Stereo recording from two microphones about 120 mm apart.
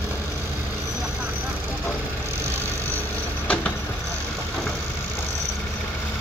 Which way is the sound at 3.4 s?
10° left (ahead or behind).